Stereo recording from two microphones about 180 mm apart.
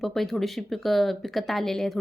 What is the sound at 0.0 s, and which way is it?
Speech, centre (ahead or behind).